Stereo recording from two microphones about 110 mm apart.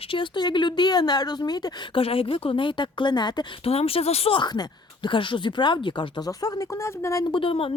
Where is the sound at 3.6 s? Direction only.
65° left (ahead or behind); by 7.3 s 25° left (ahead or behind).